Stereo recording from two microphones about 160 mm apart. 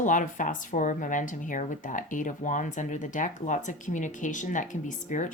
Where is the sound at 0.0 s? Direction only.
55° left (ahead or behind).